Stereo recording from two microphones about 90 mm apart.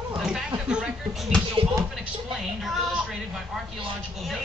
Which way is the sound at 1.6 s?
90° right.